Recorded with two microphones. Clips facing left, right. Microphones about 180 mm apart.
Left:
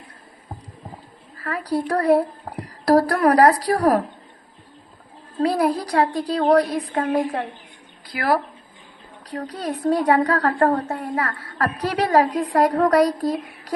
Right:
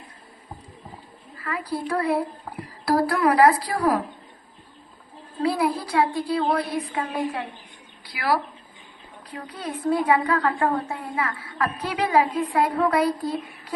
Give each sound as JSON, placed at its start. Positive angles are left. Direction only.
{"t": 1.4, "sound": "a sound", "side_deg": 40}
{"t": 1.9, "sound": "a woman's voice", "side_deg": 40}
{"t": 5.4, "sound": "a woman's voice", "side_deg": 45}